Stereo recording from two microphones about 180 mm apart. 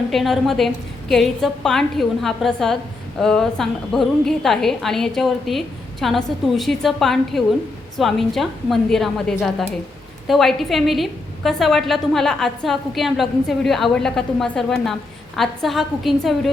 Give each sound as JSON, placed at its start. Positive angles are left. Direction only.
{"t": 0.1, "sound": "a woman's voice", "side_deg": 0}